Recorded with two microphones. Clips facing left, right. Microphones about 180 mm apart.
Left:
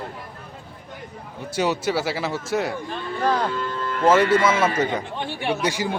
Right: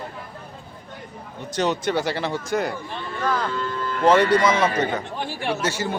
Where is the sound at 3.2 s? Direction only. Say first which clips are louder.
Left 3 dB; 35° left (ahead or behind).